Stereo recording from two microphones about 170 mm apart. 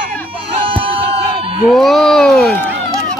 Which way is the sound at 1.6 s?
Centre (ahead or behind).